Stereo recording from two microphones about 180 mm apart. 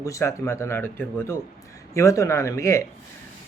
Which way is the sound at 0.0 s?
15° left (ahead or behind).